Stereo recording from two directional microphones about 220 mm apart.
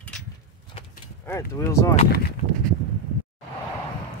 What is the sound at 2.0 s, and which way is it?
Speech, 45° left (ahead or behind).